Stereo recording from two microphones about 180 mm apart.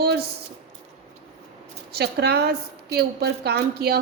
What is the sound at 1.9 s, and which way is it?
A woman's voice, 65° right (ahead or behind).